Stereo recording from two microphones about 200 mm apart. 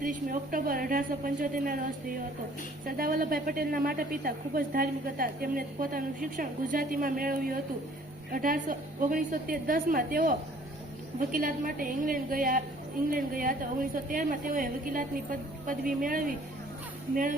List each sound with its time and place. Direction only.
0.0 s a woman's voice: 45° right (ahead or behind)